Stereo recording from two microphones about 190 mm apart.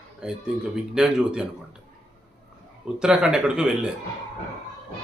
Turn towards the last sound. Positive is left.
turn(degrees=-5)  # may be behind; listen again after turning